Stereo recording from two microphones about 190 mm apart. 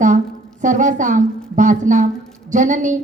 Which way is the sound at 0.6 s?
40° right (ahead or behind).